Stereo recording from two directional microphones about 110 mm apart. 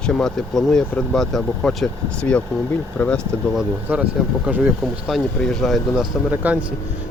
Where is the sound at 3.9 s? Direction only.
10° right (ahead or behind).